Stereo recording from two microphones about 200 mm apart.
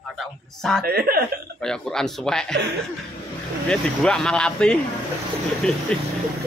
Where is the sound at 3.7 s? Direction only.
5° left (ahead or behind).